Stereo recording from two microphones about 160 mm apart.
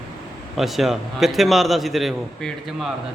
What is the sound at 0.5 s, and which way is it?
A man's voice, centre (ahead or behind).